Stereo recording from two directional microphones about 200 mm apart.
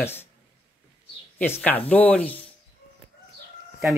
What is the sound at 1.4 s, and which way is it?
Speech, 10° left (ahead or behind).